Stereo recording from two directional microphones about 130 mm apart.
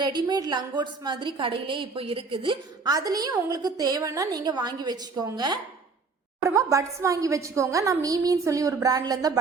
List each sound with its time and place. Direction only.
0.0 s a woman's voice: 35° right (ahead or behind)